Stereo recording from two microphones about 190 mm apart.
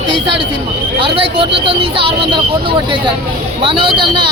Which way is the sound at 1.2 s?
30° right (ahead or behind).